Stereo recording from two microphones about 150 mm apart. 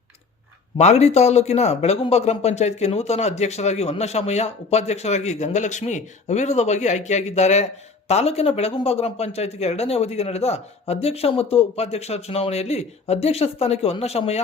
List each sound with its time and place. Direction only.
0.8 s speech: 45° left (ahead or behind)